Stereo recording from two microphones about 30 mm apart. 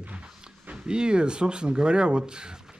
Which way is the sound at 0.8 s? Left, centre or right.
Right.